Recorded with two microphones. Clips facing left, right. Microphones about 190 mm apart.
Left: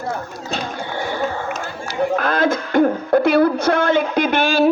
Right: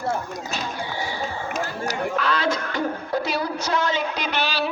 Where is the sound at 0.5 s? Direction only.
55° left (ahead or behind).